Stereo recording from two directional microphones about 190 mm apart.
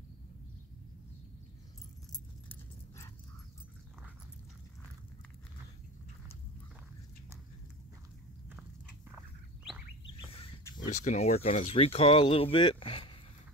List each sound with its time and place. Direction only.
10.9 s speech: 40° left (ahead or behind)